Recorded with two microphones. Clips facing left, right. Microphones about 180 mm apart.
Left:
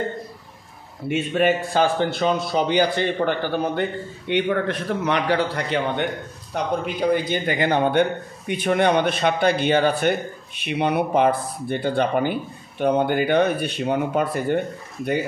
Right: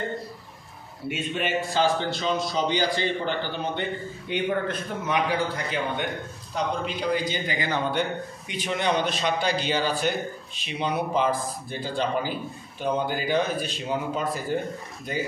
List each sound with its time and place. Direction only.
1.4 s a man's voice: 50° left (ahead or behind)
4.3 s a man's voice: 70° left (ahead or behind)
6.5 s a man's voice: 55° left (ahead or behind)